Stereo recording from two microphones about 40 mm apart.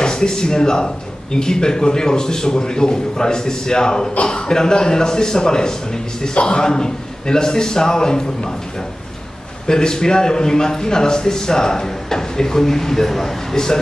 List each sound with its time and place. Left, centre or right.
0.0 s speech: centre
9.7 s speech: centre